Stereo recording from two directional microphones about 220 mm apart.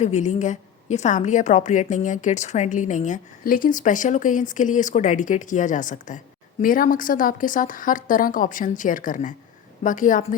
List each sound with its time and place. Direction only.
0.0 s a woman's voice: 30° left (ahead or behind)